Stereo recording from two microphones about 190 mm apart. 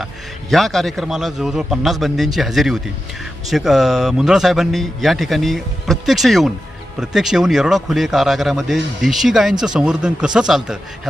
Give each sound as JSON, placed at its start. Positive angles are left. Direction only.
{"t": 0.5, "sound": "a man's voice", "side_deg": 0}